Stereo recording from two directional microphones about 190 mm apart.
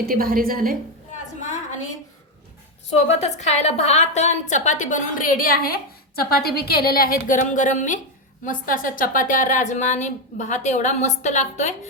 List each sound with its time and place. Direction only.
0.0 s a woman's voice: 50° right (ahead or behind)
1.4 s a sound: 40° left (ahead or behind)
2.9 s a woman's voice: 35° left (ahead or behind)